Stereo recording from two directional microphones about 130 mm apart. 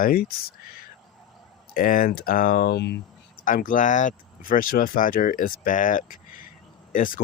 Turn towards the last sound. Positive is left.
turn(degrees=90)